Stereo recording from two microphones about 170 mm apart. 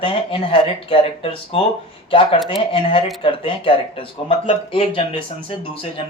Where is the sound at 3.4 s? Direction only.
30° left (ahead or behind).